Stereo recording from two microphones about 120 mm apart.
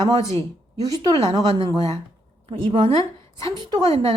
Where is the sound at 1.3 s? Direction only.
50° right (ahead or behind).